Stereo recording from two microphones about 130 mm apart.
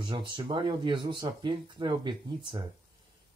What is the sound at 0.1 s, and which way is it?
A man's voice, 40° right (ahead or behind).